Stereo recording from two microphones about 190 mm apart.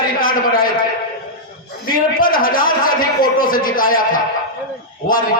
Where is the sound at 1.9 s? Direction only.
50° left (ahead or behind).